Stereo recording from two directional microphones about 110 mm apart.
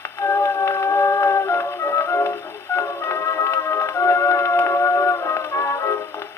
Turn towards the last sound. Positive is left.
turn(degrees=25)  # may be behind; listen again after turning